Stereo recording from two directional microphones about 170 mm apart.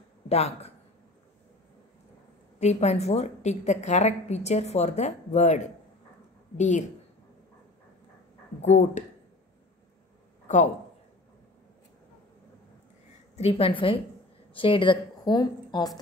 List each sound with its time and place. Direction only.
0.3 s speech: 40° left (ahead or behind)
2.6 s a woman's voice: 40° left (ahead or behind)
8.6 s a woman's voice: 40° left (ahead or behind)
13.4 s a woman's voice: 35° left (ahead or behind)